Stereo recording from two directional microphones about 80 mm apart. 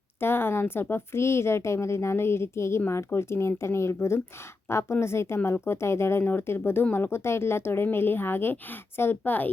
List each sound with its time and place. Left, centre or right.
0.2 s a woman's voice: left